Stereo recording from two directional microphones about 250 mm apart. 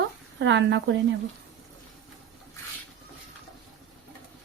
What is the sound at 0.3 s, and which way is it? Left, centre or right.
Speech, right.